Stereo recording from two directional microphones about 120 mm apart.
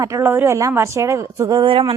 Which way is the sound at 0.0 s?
25° right (ahead or behind).